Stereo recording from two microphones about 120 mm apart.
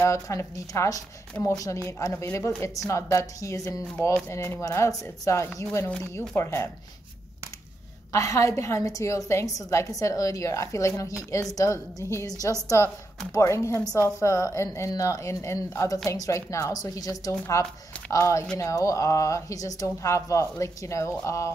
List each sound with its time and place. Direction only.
0.0 s a woman's voice: 25° left (ahead or behind)
8.1 s a woman's voice: 25° left (ahead or behind)